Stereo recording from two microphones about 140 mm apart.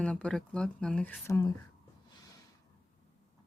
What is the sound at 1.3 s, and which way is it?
Speech, 25° left (ahead or behind).